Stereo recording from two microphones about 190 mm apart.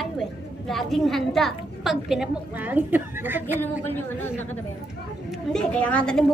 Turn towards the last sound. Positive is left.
turn(degrees=5)  # may be behind; listen again after turning